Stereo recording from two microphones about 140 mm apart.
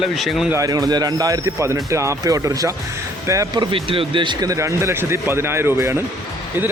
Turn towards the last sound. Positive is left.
turn(degrees=-20)  # may be behind; listen again after turning